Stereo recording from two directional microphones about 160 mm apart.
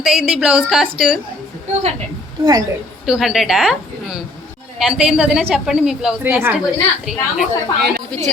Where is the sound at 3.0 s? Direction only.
5° right (ahead or behind).